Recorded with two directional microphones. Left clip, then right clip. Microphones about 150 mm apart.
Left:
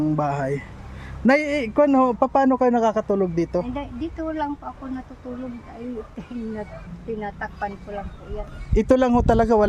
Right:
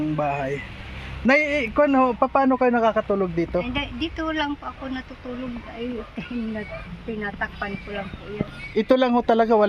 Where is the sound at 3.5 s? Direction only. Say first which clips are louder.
Right 1 dB; 10° left (ahead or behind).